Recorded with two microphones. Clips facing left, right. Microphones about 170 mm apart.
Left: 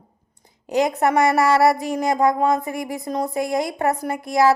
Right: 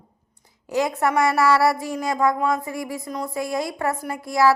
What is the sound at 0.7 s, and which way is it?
A woman's voice, 20° left (ahead or behind).